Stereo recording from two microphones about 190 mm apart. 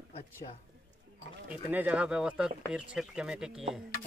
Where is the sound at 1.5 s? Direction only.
10° right (ahead or behind).